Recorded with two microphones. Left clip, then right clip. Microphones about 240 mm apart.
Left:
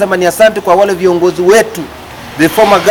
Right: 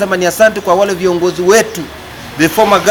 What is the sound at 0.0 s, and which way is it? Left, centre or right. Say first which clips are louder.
Speech: left 2 dB; centre.